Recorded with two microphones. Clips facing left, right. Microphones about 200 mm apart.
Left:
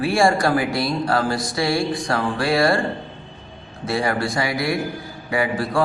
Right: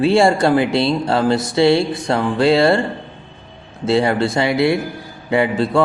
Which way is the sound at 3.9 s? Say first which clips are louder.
Right 6 dB; 25° right (ahead or behind).